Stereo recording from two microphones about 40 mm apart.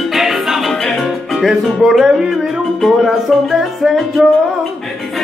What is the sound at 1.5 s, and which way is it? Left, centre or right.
Speech, centre.